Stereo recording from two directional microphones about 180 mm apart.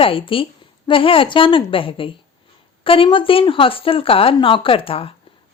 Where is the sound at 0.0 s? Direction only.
30° left (ahead or behind).